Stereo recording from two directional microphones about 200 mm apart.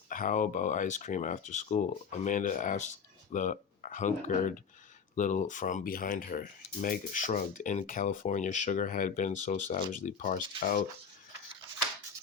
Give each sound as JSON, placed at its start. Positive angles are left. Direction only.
{"t": 0.1, "sound": "speech", "side_deg": 40}